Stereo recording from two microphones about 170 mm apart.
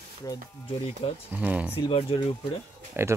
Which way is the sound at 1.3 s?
10° right (ahead or behind).